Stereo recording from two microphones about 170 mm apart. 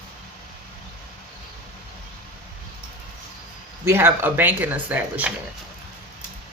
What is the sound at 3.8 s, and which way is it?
Speech, 15° right (ahead or behind).